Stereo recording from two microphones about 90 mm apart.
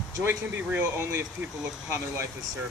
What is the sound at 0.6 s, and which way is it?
Speech, 15° right (ahead or behind).